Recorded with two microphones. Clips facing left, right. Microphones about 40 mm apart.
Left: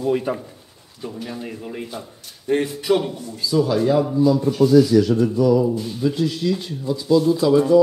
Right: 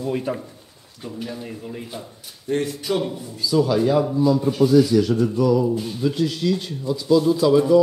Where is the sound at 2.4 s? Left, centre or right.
Left.